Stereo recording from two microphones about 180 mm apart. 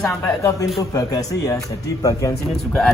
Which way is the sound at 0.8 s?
20° left (ahead or behind).